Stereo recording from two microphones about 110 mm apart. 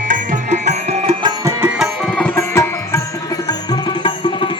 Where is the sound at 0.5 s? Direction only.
90° right.